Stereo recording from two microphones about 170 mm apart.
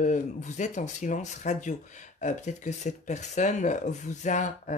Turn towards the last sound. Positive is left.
turn(degrees=45)  # may be behind; listen again after turning